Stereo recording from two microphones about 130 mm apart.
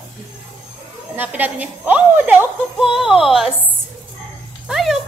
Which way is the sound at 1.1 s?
15° right (ahead or behind).